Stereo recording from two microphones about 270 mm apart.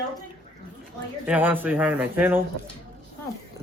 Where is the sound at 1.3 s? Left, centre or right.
Centre.